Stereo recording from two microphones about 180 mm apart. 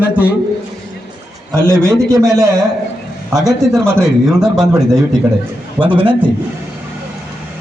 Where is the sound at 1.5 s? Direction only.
15° right (ahead or behind).